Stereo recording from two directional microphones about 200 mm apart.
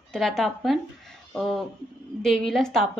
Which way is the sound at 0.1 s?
Centre (ahead or behind).